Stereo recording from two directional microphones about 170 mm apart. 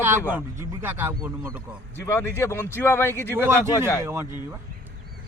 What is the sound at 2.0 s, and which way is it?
Speech, 15° left (ahead or behind).